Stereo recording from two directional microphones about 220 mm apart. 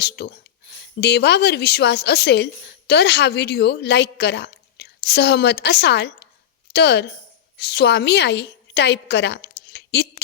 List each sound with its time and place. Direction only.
0.0 s a woman's voice: 45° left (ahead or behind)